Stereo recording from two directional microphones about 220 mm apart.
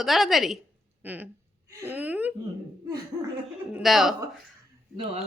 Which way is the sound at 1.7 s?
10° right (ahead or behind).